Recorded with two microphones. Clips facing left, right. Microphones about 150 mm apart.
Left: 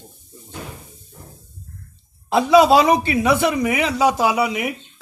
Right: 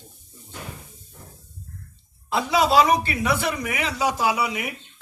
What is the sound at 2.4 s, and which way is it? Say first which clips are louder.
Speech: left 6 dB; 20° left (ahead or behind).